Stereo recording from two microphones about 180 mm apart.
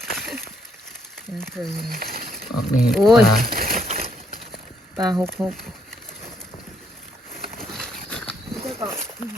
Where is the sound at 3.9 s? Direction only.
35° right (ahead or behind).